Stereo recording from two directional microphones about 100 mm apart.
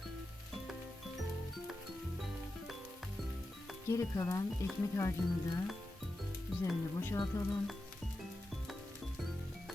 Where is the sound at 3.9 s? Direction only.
30° left (ahead or behind).